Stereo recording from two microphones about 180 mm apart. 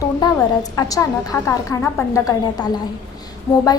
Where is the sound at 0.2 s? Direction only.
20° left (ahead or behind).